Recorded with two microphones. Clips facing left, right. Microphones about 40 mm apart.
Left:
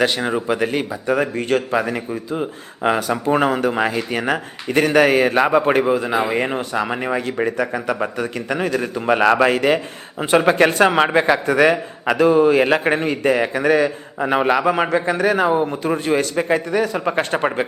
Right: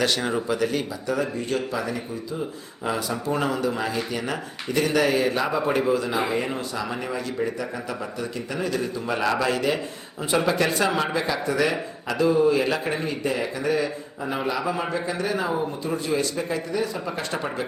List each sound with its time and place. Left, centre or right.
0.0 s speech: left
5.8 s a man's voice: left
6.3 s speech: left